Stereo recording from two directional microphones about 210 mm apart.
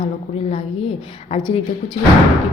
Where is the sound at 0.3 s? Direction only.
30° left (ahead or behind).